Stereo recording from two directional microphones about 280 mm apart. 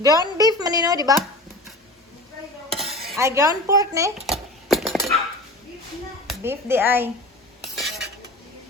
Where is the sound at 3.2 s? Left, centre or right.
Centre.